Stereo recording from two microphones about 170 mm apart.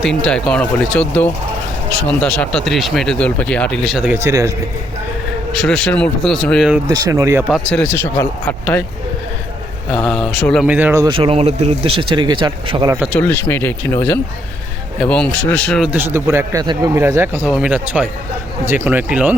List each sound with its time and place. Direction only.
0.0 s speech: 5° left (ahead or behind)
4.1 s a man's voice: 15° right (ahead or behind)
5.5 s speech: 5° left (ahead or behind)
6.8 s speech: 20° right (ahead or behind)
7.4 s speech: centre (ahead or behind)
9.9 s speech: 5° left (ahead or behind)
10.7 s a man's voice: 10° right (ahead or behind)
11.0 s speech: 30° right (ahead or behind)
13.1 s speech: 15° left (ahead or behind)
15.9 s a man's voice: 10° right (ahead or behind)